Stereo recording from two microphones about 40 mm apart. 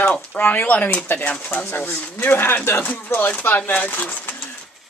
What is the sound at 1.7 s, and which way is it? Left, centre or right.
Speech, left.